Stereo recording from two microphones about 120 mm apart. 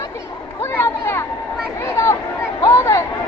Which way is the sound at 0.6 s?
20° left (ahead or behind).